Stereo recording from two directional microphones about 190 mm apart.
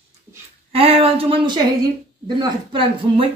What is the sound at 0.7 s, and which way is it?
Speech, 30° right (ahead or behind).